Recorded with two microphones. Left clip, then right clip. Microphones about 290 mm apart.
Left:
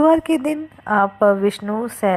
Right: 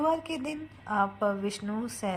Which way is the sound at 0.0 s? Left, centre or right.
Left.